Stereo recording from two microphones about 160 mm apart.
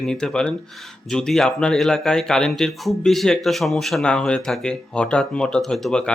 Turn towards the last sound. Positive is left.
turn(degrees=5)  # may be behind; listen again after turning